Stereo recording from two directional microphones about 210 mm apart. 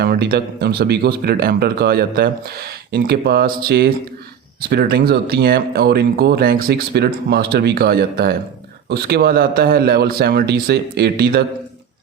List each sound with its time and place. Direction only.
0.0 s speech: 50° right (ahead or behind)